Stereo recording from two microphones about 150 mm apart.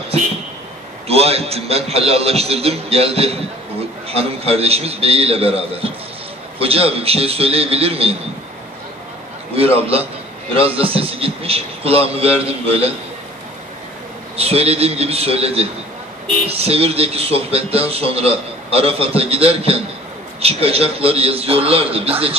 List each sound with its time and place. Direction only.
1.0 s a man's voice: 40° right (ahead or behind)
9.6 s a man's voice: 40° right (ahead or behind)
14.3 s a man's voice: 40° right (ahead or behind)